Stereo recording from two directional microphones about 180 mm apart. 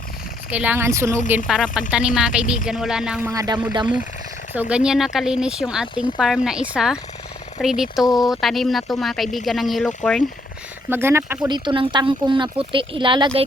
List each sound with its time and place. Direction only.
0.5 s a woman's voice: 10° right (ahead or behind)
1.5 s speech: centre (ahead or behind); by 3.6 s 20° right (ahead or behind)
4.5 s speech: 10° right (ahead or behind)
10.8 s a woman's voice: 15° right (ahead or behind)
11.4 s speech: 25° right (ahead or behind)